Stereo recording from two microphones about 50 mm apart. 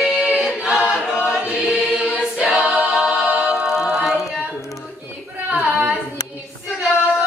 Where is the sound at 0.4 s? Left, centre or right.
Centre.